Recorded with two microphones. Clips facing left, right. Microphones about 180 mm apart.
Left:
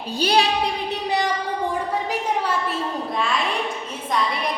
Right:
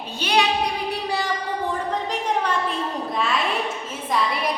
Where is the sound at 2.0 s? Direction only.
5° left (ahead or behind).